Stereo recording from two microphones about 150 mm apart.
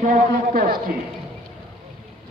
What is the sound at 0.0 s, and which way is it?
Speech, 60° right (ahead or behind).